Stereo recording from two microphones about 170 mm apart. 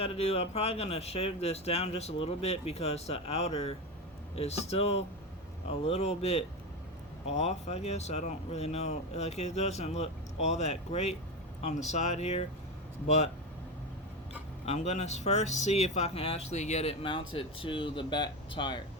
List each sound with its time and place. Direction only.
0.0 s speech: 35° left (ahead or behind)
14.6 s speech: 40° left (ahead or behind)